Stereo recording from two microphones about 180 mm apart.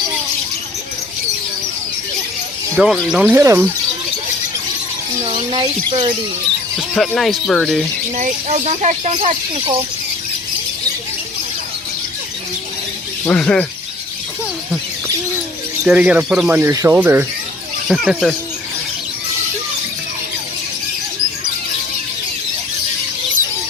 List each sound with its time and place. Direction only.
2.7 s speech: centre (ahead or behind); by 3.7 s 15° right (ahead or behind)
5.2 s speech: 25° right (ahead or behind)
6.7 s speech: centre (ahead or behind)
8.1 s speech: 40° right (ahead or behind)
13.2 s speech: 5° left (ahead or behind)
15.8 s speech: 5° right (ahead or behind)